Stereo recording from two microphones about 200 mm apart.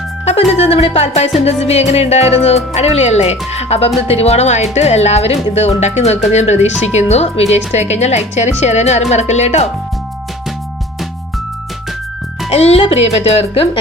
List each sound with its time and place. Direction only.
0.3 s speech: 30° left (ahead or behind)
12.5 s speech: 30° left (ahead or behind)